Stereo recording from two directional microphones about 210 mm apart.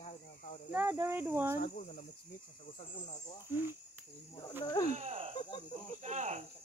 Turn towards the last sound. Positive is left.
turn(degrees=-35)  # may be behind; listen again after turning